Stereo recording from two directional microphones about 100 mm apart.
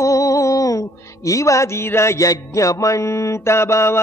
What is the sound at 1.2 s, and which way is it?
Music, 35° left (ahead or behind).